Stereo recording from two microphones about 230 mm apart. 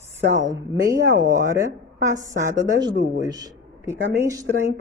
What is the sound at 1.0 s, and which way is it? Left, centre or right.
Speech, centre.